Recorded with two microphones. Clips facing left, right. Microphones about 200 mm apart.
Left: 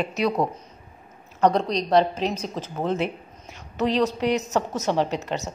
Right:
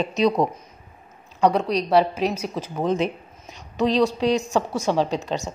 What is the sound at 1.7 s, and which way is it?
A woman's voice, 10° right (ahead or behind).